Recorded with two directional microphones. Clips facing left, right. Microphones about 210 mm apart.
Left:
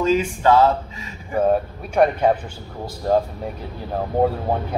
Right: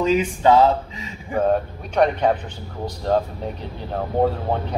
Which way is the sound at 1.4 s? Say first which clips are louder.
Left 1 dB; 5° left (ahead or behind).